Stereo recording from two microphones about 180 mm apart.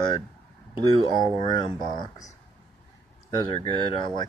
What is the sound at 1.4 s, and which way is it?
Speech, 25° left (ahead or behind).